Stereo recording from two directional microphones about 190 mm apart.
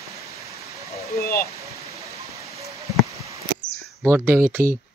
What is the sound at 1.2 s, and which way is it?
Speech, 55° left (ahead or behind).